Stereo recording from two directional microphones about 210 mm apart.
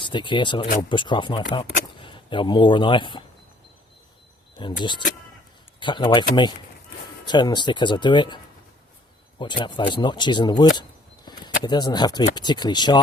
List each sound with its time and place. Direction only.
0.0 s speech: 20° left (ahead or behind)
4.5 s speech: 20° left (ahead or behind)
7.3 s speech: 20° left (ahead or behind)
9.4 s speech: 20° left (ahead or behind)
11.3 s a sound: 20° left (ahead or behind)
11.6 s speech: 20° left (ahead or behind)